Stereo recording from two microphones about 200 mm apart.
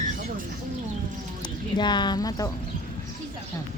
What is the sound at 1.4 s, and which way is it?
Speech, 20° left (ahead or behind).